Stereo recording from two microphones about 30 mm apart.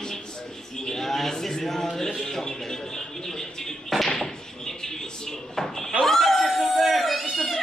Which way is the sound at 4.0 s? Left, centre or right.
Centre.